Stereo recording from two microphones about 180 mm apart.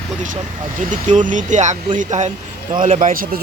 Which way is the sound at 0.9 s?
45° right (ahead or behind).